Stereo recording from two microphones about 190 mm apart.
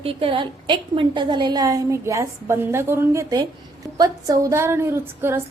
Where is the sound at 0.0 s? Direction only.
30° right (ahead or behind).